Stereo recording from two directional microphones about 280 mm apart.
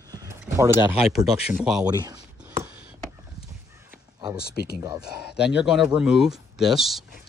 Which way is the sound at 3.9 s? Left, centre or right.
Centre.